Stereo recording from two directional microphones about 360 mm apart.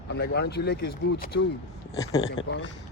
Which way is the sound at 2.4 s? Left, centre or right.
Left.